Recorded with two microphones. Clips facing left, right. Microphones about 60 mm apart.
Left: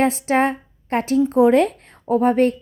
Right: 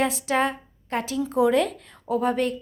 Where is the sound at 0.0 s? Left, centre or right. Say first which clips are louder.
Left 5 dB; left.